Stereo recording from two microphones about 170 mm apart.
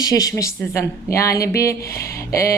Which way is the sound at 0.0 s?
20° left (ahead or behind).